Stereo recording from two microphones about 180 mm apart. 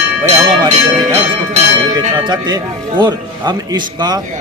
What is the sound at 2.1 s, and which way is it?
A man's voice, 25° right (ahead or behind).